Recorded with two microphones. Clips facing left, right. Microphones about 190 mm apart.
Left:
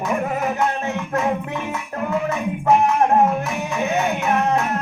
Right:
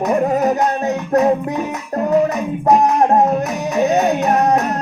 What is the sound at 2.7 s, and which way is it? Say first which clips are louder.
Music: right 3 dB; 40° right (ahead or behind).